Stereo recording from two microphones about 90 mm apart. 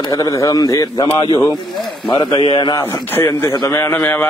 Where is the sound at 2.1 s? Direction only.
55° left (ahead or behind).